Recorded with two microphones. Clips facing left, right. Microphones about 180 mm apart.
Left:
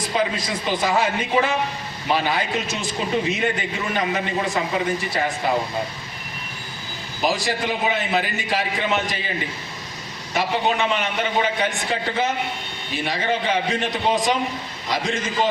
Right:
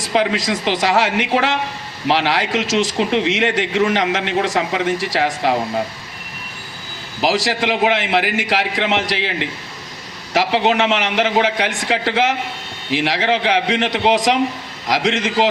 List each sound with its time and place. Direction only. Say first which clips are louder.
0.0 s a man's voice: right 5 dB; 85° right
7.2 s a man's voice: right 4 dB; 90° right